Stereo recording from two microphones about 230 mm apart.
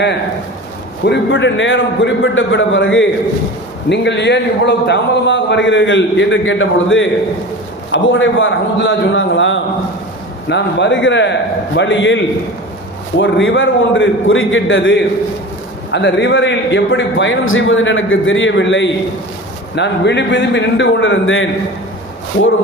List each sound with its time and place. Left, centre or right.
1.0 s a man's voice: left